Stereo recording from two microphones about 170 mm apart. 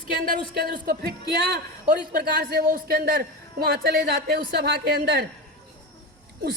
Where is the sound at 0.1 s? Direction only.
65° right (ahead or behind).